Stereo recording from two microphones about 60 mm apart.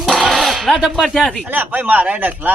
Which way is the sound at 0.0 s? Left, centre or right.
Centre.